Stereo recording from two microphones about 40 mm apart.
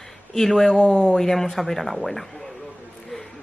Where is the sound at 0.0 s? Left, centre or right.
Centre.